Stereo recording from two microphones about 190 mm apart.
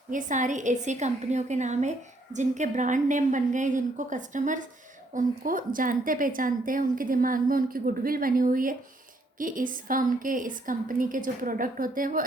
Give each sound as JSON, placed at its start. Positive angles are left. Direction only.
{"t": 0.1, "sound": "a woman's voice", "side_deg": -40}